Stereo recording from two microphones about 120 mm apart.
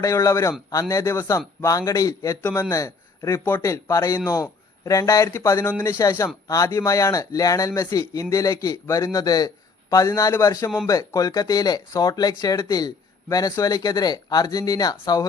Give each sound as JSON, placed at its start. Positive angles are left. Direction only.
{"t": 0.0, "sound": "speech", "side_deg": 25}